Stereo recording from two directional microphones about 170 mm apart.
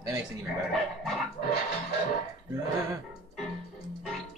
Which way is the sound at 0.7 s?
Centre (ahead or behind).